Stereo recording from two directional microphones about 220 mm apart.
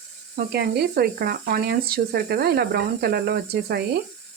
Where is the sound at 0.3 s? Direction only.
45° right (ahead or behind).